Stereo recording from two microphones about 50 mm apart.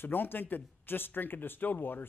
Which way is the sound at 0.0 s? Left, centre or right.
Left.